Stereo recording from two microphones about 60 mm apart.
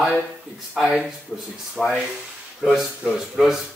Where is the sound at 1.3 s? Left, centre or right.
Centre.